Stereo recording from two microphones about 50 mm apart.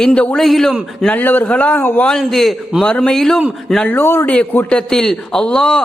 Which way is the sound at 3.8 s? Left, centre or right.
Left.